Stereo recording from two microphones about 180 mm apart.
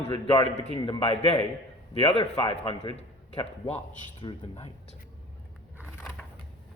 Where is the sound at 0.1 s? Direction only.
30° left (ahead or behind).